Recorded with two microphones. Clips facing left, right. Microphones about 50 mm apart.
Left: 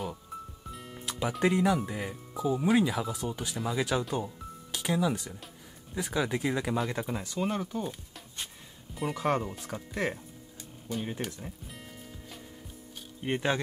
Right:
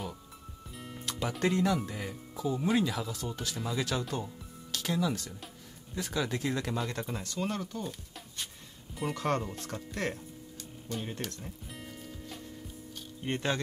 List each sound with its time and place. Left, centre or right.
0.7 s music: centre
1.9 s speech: centre
11.6 s music: centre
13.2 s speech: centre